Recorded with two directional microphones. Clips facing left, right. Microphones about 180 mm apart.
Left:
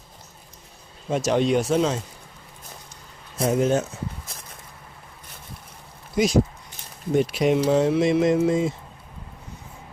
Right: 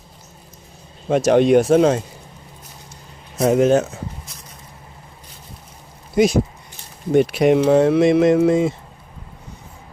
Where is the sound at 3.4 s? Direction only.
75° right (ahead or behind).